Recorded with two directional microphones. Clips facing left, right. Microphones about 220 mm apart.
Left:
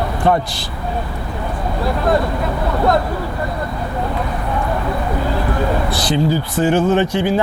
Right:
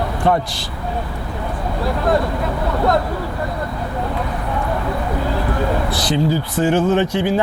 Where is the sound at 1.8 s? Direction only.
20° left (ahead or behind).